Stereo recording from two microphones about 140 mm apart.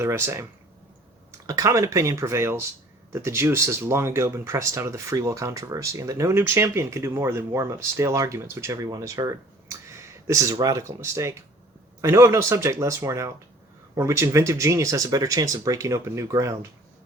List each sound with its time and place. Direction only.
0.0 s speech: 20° right (ahead or behind)